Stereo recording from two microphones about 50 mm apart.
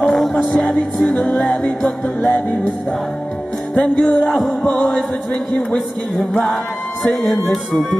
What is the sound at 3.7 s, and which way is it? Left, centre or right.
Music, left.